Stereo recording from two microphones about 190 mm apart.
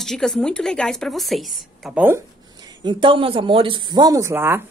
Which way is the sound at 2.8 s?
25° right (ahead or behind).